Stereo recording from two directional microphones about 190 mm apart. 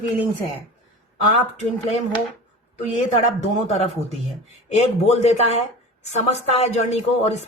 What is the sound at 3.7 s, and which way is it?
Speech, 35° left (ahead or behind).